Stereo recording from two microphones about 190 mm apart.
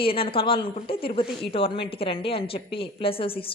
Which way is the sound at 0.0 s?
30° left (ahead or behind).